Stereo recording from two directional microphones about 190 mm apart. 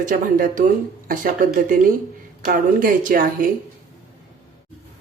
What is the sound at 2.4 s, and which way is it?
Speech, 45° right (ahead or behind).